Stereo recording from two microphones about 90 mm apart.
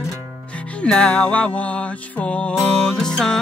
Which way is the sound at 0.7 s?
15° left (ahead or behind).